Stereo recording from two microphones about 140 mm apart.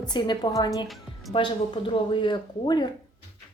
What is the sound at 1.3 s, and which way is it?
Speech, 40° left (ahead or behind).